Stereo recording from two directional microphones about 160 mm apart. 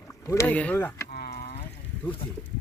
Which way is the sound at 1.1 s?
75° left (ahead or behind).